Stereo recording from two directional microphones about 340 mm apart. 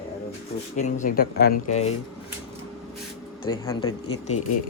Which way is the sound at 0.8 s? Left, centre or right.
Left.